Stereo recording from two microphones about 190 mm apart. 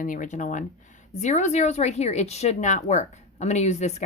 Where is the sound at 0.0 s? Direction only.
45° left (ahead or behind).